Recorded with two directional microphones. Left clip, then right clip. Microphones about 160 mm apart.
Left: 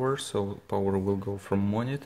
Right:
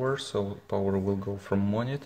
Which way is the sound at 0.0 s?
25° left (ahead or behind).